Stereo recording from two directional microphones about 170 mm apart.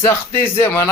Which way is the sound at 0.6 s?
15° left (ahead or behind).